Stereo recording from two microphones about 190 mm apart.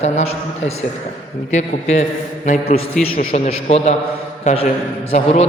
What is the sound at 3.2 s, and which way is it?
A man's voice, 35° left (ahead or behind).